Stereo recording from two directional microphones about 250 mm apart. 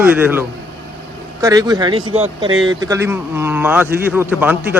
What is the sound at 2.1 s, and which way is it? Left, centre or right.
Speech, right.